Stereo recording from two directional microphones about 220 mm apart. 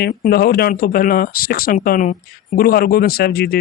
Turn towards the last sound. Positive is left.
turn(degrees=45)  # may be behind; listen again after turning